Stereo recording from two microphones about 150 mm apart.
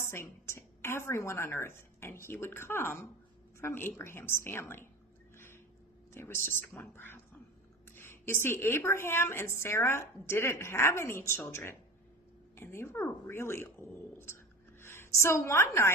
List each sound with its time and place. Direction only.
0.0 s a woman's voice: 15° left (ahead or behind)
6.1 s a woman's voice: 15° left (ahead or behind)